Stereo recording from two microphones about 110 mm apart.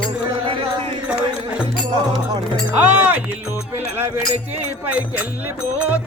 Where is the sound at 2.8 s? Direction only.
15° right (ahead or behind).